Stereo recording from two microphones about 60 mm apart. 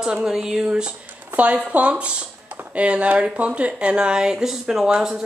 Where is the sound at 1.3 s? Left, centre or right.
Right.